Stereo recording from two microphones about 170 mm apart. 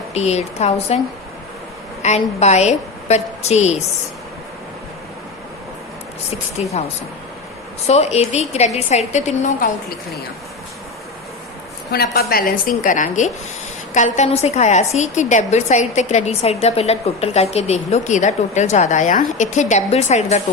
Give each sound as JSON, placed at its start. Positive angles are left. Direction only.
{"t": 0.1, "sound": "a woman's voice", "side_deg": 40}
{"t": 2.0, "sound": "a woman's voice", "side_deg": 40}
{"t": 6.6, "sound": "a woman's voice", "side_deg": 40}
{"t": 7.9, "sound": "a woman's voice", "side_deg": 40}
{"t": 11.9, "sound": "a woman's voice", "side_deg": 65}